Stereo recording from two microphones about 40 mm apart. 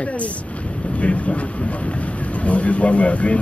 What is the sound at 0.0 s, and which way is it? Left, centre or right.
A man's voice, left.